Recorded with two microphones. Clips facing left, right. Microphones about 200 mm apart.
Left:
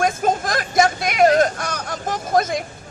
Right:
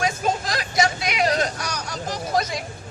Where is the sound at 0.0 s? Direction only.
50° left (ahead or behind).